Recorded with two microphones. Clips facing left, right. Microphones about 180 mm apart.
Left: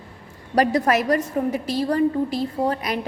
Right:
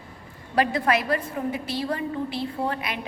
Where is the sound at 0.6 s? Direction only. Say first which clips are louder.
Left 4 dB; 40° left (ahead or behind).